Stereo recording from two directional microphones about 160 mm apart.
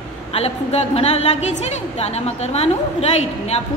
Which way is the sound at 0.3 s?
40° left (ahead or behind).